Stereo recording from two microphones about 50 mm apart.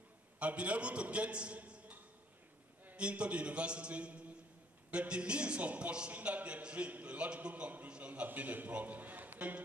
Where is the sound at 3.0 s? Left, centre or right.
Right.